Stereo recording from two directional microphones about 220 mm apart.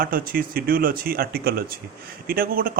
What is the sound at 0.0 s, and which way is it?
Speech, 40° right (ahead or behind).